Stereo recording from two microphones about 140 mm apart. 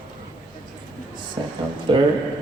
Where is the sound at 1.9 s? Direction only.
35° right (ahead or behind).